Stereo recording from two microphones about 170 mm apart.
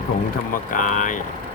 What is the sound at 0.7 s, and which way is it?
Speech, 50° left (ahead or behind).